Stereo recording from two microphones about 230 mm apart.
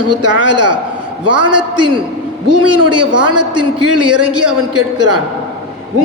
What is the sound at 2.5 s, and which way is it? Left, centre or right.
A man's voice, right.